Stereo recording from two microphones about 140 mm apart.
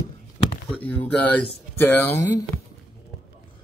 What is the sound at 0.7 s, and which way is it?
Speech, 15° left (ahead or behind).